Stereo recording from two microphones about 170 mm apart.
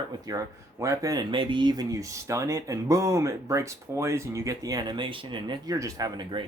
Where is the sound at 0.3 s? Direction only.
20° right (ahead or behind).